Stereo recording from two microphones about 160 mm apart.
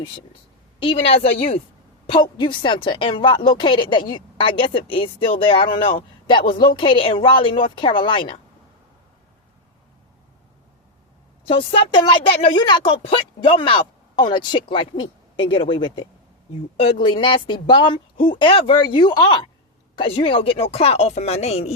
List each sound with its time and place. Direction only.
0.8 s a woman's voice: 35° left (ahead or behind)
11.4 s a woman's voice: 35° left (ahead or behind)